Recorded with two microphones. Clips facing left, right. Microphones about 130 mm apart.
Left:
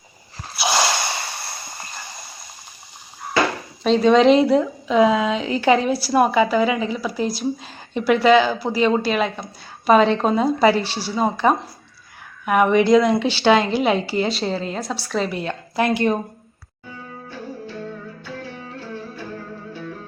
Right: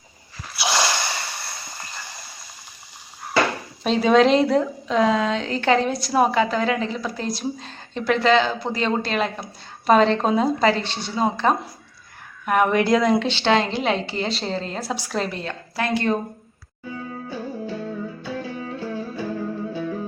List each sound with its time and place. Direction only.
0.6 s a sound: 20° left (ahead or behind)
3.8 s a woman's voice: 5° right (ahead or behind)
14.8 s a woman's voice: 10° right (ahead or behind)
15.2 s a woman's voice: 10° left (ahead or behind)